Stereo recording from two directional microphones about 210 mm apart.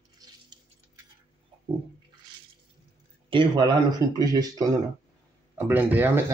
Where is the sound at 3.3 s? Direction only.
20° right (ahead or behind).